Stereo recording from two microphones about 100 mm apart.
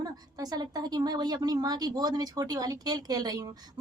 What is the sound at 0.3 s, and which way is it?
A woman's voice, 40° right (ahead or behind).